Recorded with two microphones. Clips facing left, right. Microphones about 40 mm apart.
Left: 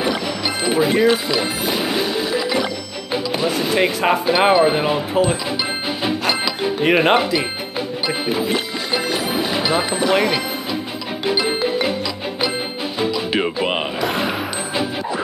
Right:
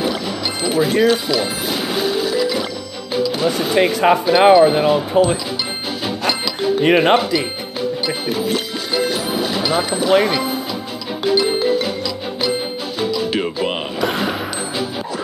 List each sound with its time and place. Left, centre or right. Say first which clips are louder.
0.0 s music: even; centre
1.3 s speech: even; centre
6.0 s music: left 1 dB; centre
6.8 s speech: right 2 dB; centre
8.1 s music: even; centre
11.2 s music: right 3 dB; centre
13.0 s music: even; centre
14.0 s music: right 3 dB; centre